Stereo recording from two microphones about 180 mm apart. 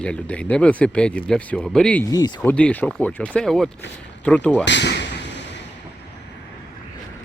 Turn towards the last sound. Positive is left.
turn(degrees=75)  # may be behind; listen again after turning